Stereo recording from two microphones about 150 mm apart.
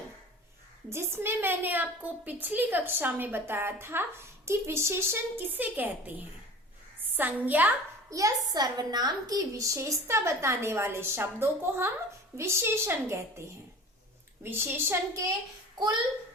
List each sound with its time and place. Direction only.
0.9 s a woman's voice: 15° right (ahead or behind)
7.2 s a woman's voice: 10° right (ahead or behind)
14.4 s a woman's voice: 15° right (ahead or behind)